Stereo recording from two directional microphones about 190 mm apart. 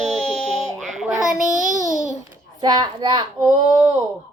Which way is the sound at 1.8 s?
Centre (ahead or behind).